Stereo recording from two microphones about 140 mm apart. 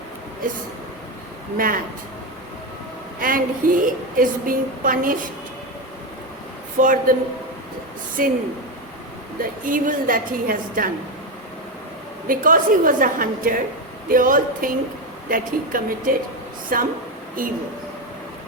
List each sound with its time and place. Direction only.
1.5 s a woman's voice: 85° right
3.2 s a woman's voice: 85° right
6.7 s a woman's voice: 75° right (ahead or behind)
8.2 s a woman's voice: 85° right
9.4 s a woman's voice: 75° right (ahead or behind)
12.3 s a woman's voice: 75° right (ahead or behind)
16.7 s speech: 90° right